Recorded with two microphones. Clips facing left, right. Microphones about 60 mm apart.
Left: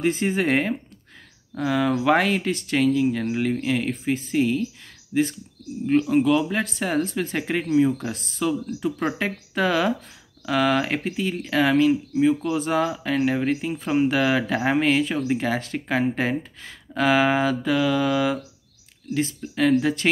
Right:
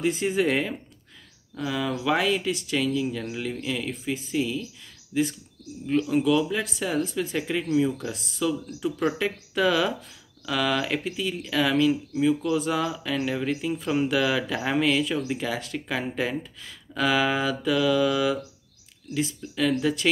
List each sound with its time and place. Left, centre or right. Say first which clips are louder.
0.0 s speech: left 1 dB; left
7.7 s speech: left 4 dB; left
8.1 s speech: left 2 dB; left